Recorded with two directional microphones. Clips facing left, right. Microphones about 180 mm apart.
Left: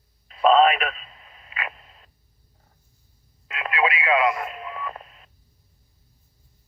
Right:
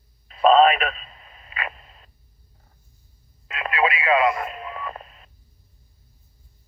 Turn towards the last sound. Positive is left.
turn(degrees=-35)  # may be behind; listen again after turning